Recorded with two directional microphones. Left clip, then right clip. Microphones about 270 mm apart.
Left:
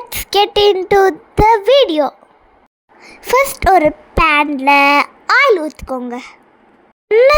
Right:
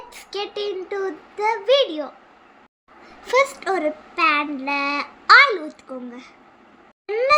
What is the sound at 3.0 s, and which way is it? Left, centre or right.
Child singing, left.